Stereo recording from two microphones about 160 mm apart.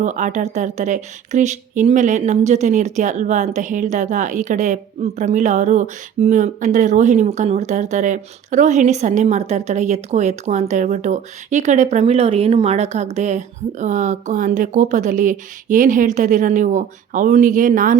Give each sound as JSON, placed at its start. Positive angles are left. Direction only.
{"t": 0.0, "sound": "speech", "side_deg": -50}